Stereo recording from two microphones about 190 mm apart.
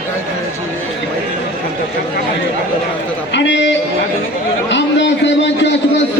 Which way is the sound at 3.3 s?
70° left (ahead or behind).